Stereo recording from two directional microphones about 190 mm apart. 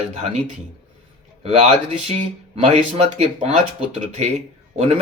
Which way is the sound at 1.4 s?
35° right (ahead or behind).